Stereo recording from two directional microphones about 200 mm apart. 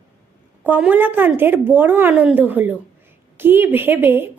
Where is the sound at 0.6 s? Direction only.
10° right (ahead or behind).